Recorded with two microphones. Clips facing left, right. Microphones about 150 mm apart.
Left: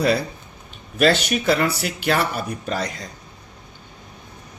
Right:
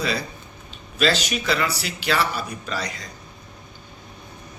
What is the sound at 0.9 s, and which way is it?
Speech, 55° left (ahead or behind).